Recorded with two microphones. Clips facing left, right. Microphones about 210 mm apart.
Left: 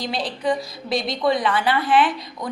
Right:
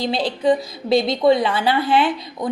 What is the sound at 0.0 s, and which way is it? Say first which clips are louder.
A woman's voice: right 5 dB; 25° right (ahead or behind).